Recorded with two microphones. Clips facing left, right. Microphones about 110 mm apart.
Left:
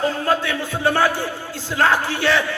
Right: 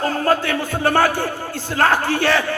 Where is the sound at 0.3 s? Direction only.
50° right (ahead or behind).